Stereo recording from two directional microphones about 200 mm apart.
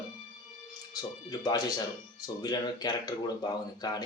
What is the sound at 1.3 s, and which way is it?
Speech, 20° left (ahead or behind).